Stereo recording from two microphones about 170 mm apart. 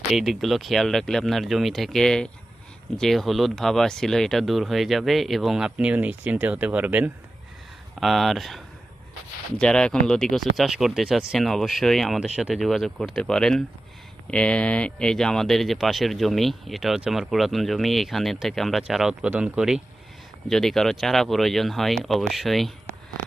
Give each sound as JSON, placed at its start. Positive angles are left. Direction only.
{"t": 0.1, "sound": "speech", "side_deg": 0}